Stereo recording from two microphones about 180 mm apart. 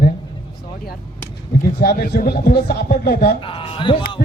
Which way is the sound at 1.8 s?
60° left (ahead or behind).